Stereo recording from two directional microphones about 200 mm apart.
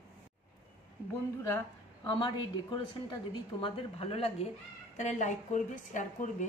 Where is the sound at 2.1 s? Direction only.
20° left (ahead or behind).